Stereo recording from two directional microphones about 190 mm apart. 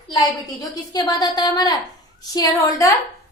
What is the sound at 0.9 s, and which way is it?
A woman's voice, 20° left (ahead or behind).